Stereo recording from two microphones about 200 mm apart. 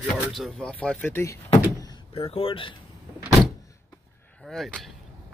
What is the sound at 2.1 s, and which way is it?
Speech, 30° left (ahead or behind).